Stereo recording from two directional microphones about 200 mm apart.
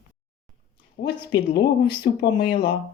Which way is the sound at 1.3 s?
55° left (ahead or behind).